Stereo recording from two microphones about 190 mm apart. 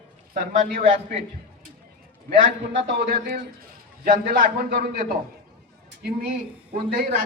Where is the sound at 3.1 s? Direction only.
55° right (ahead or behind).